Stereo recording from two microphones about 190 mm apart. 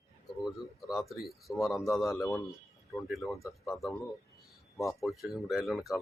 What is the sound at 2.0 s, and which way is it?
Speech, 15° left (ahead or behind).